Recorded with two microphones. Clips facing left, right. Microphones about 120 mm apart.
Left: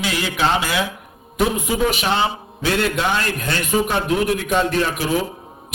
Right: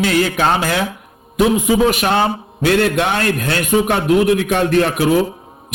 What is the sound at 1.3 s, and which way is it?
Speech, 70° right (ahead or behind).